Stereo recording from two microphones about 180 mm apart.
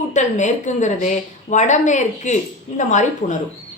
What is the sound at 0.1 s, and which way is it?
A woman's voice, 40° left (ahead or behind).